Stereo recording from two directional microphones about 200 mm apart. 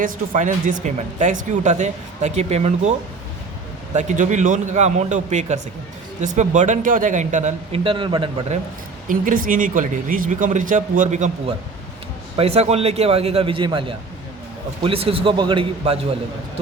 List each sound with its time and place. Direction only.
0.0 s speech: 40° right (ahead or behind)
3.9 s speech: 40° right (ahead or behind)
9.0 s a man's voice: 45° right (ahead or behind); by 16.0 s 25° right (ahead or behind)